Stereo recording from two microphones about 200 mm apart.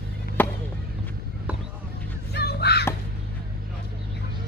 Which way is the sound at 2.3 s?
55° left (ahead or behind).